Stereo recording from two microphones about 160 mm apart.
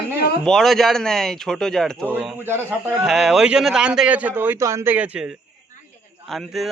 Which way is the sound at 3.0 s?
Centre (ahead or behind).